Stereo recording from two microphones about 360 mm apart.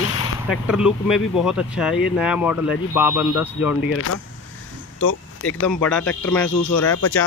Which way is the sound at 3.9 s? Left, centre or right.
Left.